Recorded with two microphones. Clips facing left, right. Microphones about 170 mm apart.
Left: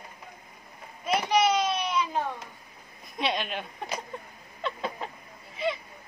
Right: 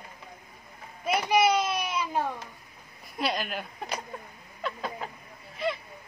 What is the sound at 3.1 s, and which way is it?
Speech, 5° right (ahead or behind).